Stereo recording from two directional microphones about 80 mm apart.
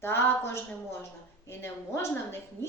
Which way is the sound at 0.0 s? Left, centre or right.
Left.